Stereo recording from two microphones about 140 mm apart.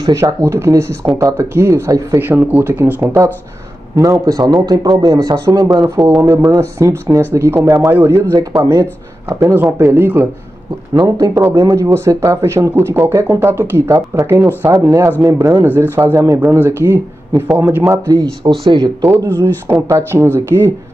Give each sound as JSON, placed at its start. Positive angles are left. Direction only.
{"t": 0.0, "sound": "speech", "side_deg": -20}
{"t": 11.0, "sound": "speech", "side_deg": -25}
{"t": 19.0, "sound": "speech", "side_deg": -20}